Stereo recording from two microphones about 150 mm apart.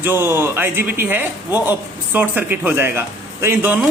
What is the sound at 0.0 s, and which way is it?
A woman's voice, 15° right (ahead or behind).